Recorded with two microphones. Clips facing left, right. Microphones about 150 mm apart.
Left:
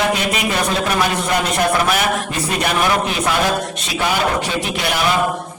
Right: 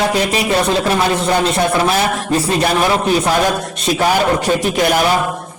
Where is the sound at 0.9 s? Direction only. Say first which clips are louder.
Right 3 dB; 30° right (ahead or behind).